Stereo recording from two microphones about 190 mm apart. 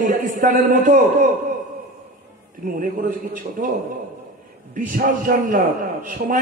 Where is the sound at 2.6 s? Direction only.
45° right (ahead or behind).